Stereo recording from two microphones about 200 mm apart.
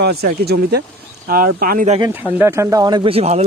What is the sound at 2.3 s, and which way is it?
Speech, 15° right (ahead or behind).